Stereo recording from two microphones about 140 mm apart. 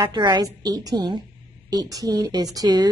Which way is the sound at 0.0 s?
30° right (ahead or behind).